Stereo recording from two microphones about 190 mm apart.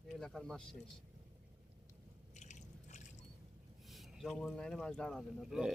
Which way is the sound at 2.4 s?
40° left (ahead or behind).